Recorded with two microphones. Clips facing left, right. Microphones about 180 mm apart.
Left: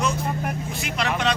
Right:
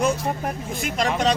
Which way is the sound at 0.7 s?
50° right (ahead or behind).